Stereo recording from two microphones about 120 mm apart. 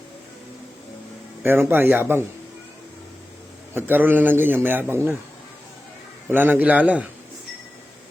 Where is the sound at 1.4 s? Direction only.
15° right (ahead or behind).